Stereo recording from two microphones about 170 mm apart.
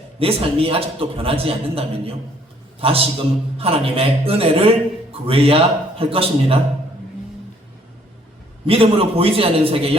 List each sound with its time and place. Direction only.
0.2 s a man's voice: 35° right (ahead or behind)
8.6 s a man's voice: 35° right (ahead or behind)